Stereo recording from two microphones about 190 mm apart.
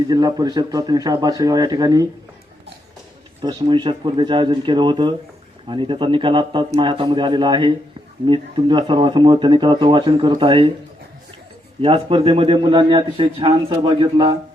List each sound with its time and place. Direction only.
0.1 s a man's voice: 20° right (ahead or behind)
3.4 s a man's voice: 25° right (ahead or behind)
11.8 s a man's voice: 30° right (ahead or behind)